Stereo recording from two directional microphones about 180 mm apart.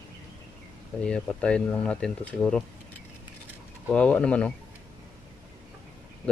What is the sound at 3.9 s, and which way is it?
Speech, 5° left (ahead or behind).